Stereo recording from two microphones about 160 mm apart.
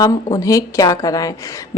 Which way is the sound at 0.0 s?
25° left (ahead or behind).